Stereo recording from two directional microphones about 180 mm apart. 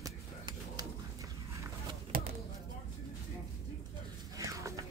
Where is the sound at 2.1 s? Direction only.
55° right (ahead or behind).